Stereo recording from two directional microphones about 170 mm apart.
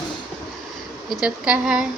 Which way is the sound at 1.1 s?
5° right (ahead or behind).